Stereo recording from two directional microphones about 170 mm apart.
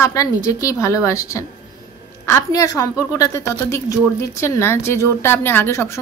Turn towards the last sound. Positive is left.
turn(degrees=15)  # may be behind; listen again after turning